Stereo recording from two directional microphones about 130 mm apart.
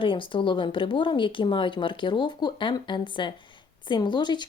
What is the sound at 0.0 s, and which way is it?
A woman's voice, 40° left (ahead or behind).